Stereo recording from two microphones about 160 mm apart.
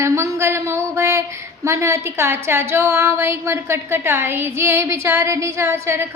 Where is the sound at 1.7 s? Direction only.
20° right (ahead or behind).